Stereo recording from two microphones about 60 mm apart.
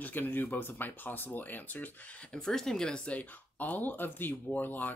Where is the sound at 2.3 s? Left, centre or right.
Centre; by 4.9 s left.